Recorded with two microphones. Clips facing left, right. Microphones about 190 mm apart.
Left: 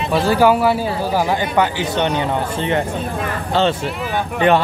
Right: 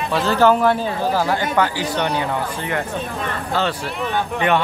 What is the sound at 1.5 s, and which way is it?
Speech, 20° left (ahead or behind).